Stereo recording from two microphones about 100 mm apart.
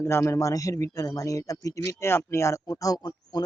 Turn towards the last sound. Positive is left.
turn(degrees=40)  # may be behind; listen again after turning